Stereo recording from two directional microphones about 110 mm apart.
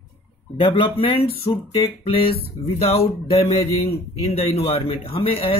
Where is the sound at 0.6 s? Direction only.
55° left (ahead or behind).